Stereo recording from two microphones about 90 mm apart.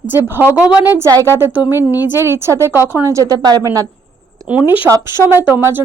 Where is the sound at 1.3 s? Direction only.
20° right (ahead or behind); by 3.9 s 40° right (ahead or behind).